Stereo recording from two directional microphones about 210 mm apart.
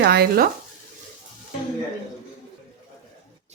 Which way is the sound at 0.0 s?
50° right (ahead or behind).